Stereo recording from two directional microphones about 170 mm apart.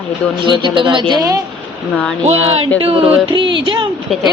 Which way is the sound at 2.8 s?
35° right (ahead or behind).